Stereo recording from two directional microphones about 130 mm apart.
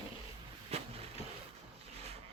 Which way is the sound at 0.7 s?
55° right (ahead or behind).